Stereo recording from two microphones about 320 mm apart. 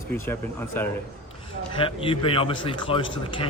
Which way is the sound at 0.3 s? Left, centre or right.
Centre.